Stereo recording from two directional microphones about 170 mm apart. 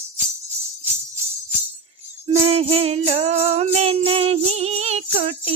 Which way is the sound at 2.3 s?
40° right (ahead or behind).